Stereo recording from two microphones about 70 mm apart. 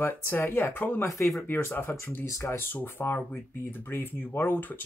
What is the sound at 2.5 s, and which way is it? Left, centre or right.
Speech, left.